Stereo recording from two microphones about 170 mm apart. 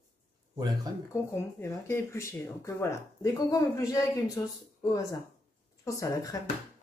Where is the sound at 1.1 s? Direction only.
15° left (ahead or behind).